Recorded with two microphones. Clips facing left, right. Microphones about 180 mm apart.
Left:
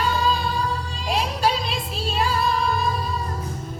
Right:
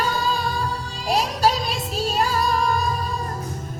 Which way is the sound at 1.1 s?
40° right (ahead or behind).